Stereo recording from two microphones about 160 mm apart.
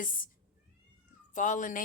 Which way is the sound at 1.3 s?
50° left (ahead or behind).